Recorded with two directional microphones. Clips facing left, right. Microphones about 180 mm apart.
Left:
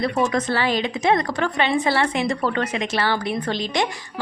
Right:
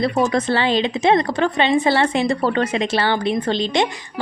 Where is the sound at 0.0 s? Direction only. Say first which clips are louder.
Right 3 dB; 25° right (ahead or behind).